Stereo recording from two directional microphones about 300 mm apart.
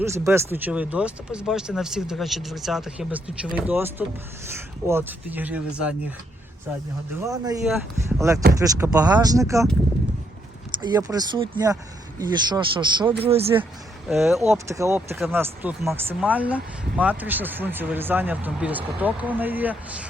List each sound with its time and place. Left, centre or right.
0.0 s speech: centre
7.3 s speech: centre
10.8 s speech: centre
14.1 s speech: centre